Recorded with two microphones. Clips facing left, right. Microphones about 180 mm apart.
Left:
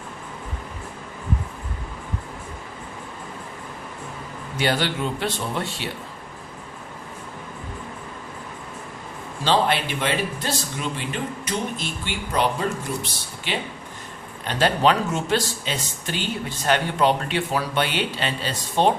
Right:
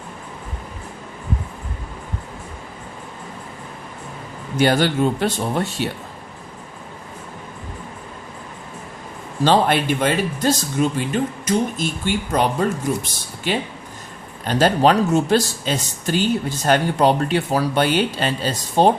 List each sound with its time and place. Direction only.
4.5 s speech: 45° right (ahead or behind)
9.4 s speech: 50° right (ahead or behind)